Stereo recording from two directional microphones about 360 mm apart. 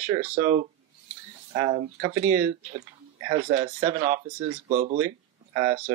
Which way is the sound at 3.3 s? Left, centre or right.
Centre.